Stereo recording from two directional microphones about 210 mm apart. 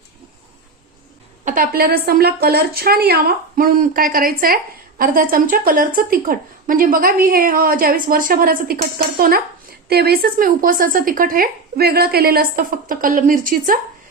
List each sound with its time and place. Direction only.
1.5 s speech: 45° right (ahead or behind)